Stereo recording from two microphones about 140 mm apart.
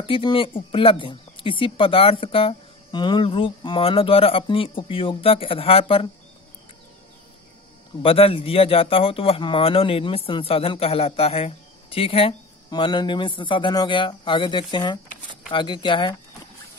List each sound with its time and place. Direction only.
0.0 s speech: 40° left (ahead or behind)
8.0 s speech: 40° left (ahead or behind)